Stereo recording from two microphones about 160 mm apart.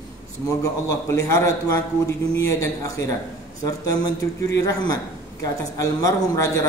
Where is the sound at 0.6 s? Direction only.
20° left (ahead or behind).